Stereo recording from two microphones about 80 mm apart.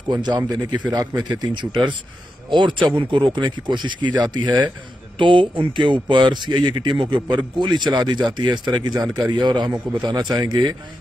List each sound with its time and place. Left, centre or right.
0.1 s speech: right
5.2 s speech: right
7.2 s speech: right